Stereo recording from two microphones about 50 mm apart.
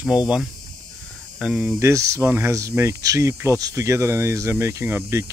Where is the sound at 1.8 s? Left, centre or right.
Right.